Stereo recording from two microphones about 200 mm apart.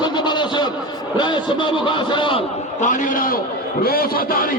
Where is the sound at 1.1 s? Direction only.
20° left (ahead or behind).